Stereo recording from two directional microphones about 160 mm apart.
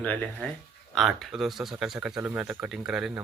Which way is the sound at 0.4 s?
5° left (ahead or behind).